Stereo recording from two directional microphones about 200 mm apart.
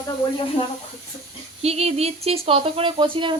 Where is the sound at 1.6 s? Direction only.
30° right (ahead or behind).